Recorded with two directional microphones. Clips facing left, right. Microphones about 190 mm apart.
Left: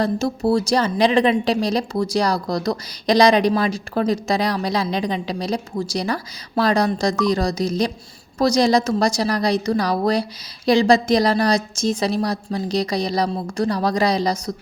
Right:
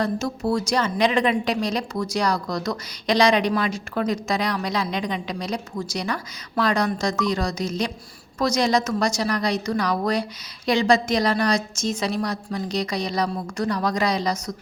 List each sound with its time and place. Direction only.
0.0 s a woman's voice: 30° left (ahead or behind)